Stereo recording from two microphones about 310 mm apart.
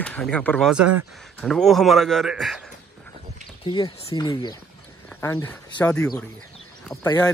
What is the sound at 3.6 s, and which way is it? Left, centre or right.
Speech, centre.